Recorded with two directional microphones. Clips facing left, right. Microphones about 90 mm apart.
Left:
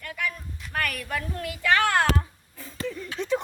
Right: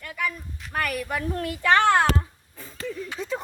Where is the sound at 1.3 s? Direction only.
35° right (ahead or behind).